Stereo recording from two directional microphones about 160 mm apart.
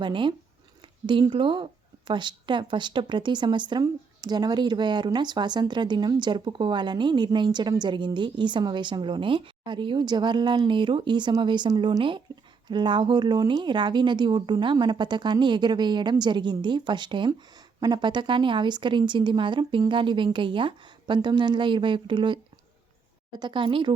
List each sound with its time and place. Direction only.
0.0 s speech: 30° right (ahead or behind)
23.4 s speech: 30° right (ahead or behind)